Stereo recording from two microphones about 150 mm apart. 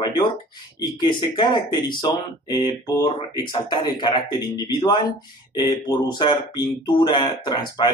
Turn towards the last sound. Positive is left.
turn(degrees=30)  # may be behind; listen again after turning